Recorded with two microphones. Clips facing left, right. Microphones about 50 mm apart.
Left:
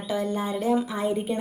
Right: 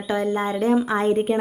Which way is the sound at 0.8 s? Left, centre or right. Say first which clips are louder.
Right 7 dB; right.